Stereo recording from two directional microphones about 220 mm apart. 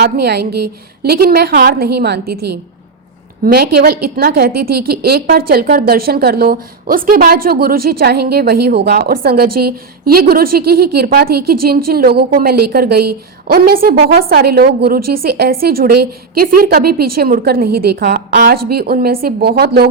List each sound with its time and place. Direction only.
0.0 s a woman's voice: 50° right (ahead or behind)